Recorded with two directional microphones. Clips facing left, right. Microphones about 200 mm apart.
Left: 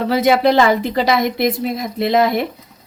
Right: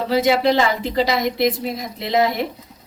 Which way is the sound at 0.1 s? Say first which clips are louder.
Left 2 dB; 55° left (ahead or behind).